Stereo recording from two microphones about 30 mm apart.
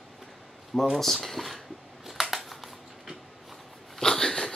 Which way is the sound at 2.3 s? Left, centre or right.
Centre.